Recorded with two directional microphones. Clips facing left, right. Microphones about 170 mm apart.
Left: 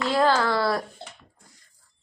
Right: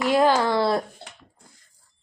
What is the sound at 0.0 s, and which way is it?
Speech, 15° right (ahead or behind).